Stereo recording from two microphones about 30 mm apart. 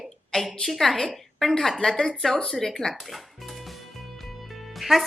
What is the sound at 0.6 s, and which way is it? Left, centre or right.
Speech, centre.